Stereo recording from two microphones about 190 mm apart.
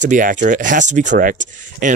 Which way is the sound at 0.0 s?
45° right (ahead or behind).